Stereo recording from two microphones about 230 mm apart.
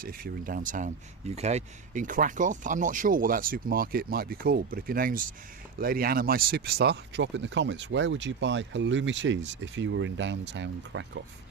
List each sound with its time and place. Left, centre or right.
0.0 s speech: right